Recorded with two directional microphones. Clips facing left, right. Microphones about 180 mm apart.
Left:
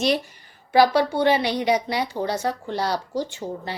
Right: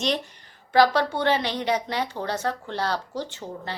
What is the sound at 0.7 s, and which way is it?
A woman's voice, 10° left (ahead or behind).